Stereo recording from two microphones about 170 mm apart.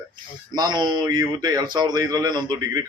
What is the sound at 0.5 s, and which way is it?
A man's voice, 25° right (ahead or behind).